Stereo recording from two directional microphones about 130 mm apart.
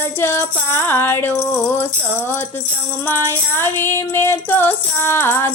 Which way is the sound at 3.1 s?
15° left (ahead or behind).